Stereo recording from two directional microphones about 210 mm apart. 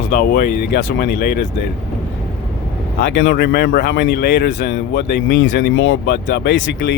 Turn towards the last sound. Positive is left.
turn(degrees=55)  # may be behind; listen again after turning